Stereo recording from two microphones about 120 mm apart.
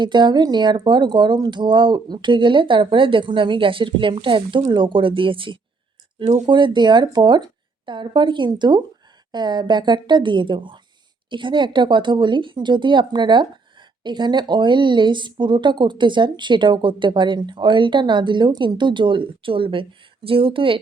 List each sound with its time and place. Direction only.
0.0 s speech: 40° right (ahead or behind)
6.2 s speech: 75° right (ahead or behind)
6.5 s speech: 40° right (ahead or behind)